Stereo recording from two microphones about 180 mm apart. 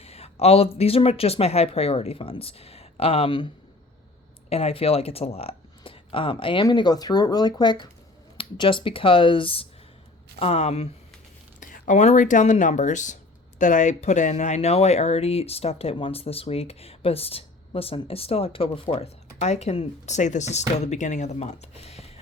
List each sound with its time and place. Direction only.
0.0 s speech: 35° left (ahead or behind)